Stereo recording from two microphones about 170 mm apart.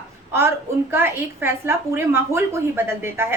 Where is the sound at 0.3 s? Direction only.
15° right (ahead or behind).